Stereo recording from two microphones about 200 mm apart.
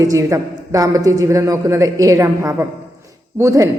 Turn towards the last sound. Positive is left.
turn(degrees=-15)  # may be behind; listen again after turning